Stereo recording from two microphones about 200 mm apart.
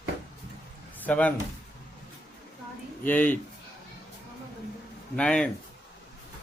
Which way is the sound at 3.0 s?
10° left (ahead or behind).